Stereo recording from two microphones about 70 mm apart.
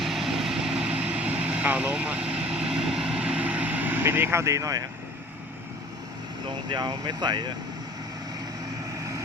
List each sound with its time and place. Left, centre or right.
0.0 s vehicle: centre; by 4.9 s right
6.7 s speech: right